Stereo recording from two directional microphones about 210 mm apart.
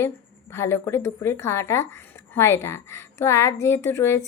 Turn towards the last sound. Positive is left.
turn(degrees=15)  # may be behind; listen again after turning